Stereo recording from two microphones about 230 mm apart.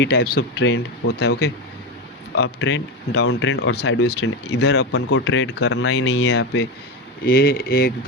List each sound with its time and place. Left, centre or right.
0.0 s speech: left
5.0 s speech: left
7.3 s speech: left